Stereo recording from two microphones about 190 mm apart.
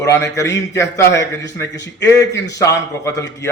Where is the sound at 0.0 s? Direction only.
15° left (ahead or behind).